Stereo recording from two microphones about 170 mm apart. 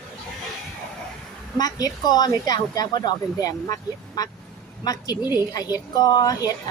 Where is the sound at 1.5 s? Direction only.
20° left (ahead or behind).